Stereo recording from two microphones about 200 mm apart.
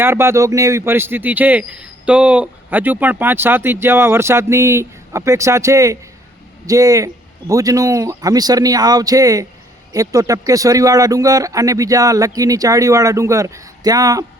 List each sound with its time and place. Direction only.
0.0 s speech: 10° right (ahead or behind)